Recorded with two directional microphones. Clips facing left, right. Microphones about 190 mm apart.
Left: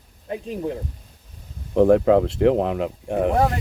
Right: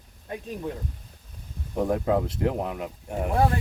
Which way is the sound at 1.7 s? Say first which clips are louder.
Left 9 dB; 75° left (ahead or behind).